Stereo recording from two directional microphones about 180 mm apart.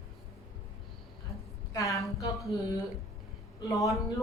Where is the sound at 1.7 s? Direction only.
20° left (ahead or behind).